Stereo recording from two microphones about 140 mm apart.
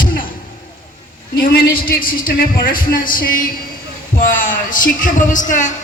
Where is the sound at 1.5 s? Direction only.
90° left.